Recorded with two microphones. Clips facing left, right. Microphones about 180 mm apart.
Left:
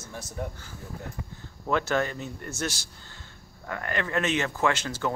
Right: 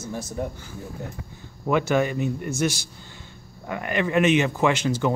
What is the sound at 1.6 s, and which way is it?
Speech, 15° right (ahead or behind).